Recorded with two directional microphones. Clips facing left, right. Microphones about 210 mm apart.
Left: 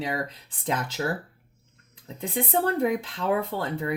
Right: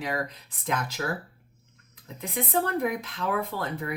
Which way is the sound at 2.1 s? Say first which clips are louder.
Left 2 dB; 30° left (ahead or behind).